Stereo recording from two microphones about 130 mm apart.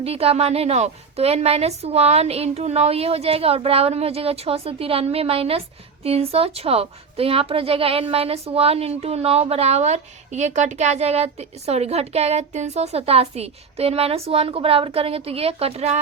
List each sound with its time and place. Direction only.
0.0 s a woman's voice: 50° right (ahead or behind)